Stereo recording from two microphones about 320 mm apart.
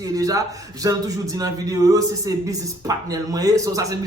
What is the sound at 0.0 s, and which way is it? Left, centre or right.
A man's voice, centre.